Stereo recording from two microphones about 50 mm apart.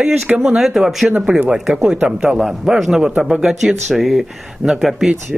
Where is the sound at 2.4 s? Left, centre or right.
Centre.